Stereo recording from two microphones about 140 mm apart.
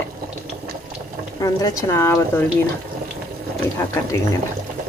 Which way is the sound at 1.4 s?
25° left (ahead or behind).